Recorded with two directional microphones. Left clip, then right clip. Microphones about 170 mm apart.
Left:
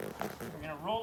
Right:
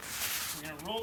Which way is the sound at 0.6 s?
20° left (ahead or behind).